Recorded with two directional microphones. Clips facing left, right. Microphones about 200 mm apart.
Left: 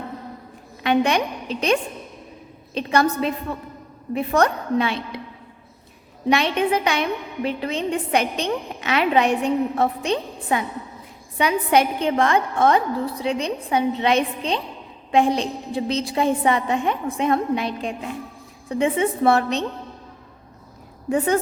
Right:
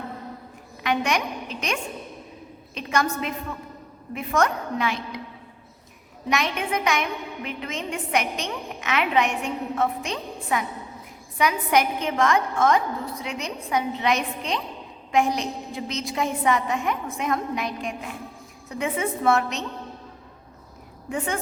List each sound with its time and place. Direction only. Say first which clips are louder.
0.8 s a woman's voice: left 5 dB; 30° left (ahead or behind)
6.2 s a woman's voice: left 6 dB; 30° left (ahead or behind)
21.1 s a woman's voice: left 8 dB; 35° left (ahead or behind)